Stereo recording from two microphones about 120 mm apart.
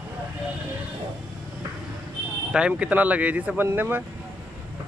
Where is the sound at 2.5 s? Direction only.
10° right (ahead or behind).